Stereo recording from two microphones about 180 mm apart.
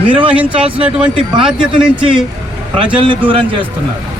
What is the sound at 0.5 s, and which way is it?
Speech, 30° right (ahead or behind).